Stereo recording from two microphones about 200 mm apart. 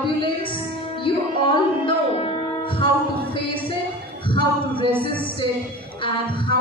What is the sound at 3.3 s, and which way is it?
Music, 25° left (ahead or behind).